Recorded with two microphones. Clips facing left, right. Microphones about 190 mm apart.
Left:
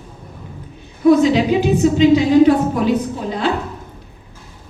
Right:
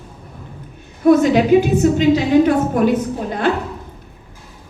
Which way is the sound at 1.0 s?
50° right (ahead or behind).